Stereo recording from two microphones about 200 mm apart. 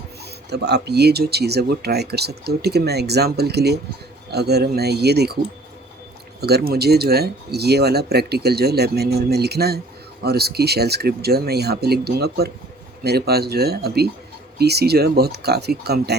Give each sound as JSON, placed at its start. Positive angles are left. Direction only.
{"t": 0.5, "sound": "speech", "side_deg": -55}
{"t": 6.4, "sound": "speech", "side_deg": -50}